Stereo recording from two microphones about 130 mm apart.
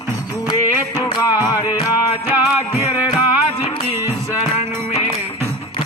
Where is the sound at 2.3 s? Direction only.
15° right (ahead or behind).